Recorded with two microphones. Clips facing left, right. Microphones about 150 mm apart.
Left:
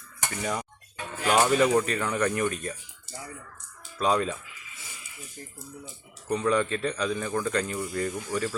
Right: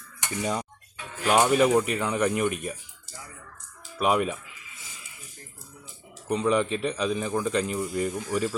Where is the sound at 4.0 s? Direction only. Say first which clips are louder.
Right 1 dB; 10° right (ahead or behind).